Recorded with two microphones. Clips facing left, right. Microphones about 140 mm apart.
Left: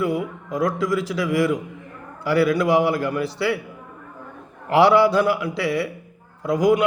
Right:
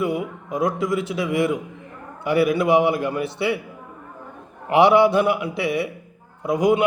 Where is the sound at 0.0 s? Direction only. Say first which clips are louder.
Left 1 dB; 20° right (ahead or behind).